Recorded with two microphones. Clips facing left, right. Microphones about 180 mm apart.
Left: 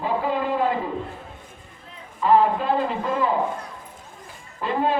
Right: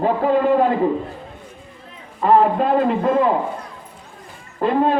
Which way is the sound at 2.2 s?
50° right (ahead or behind).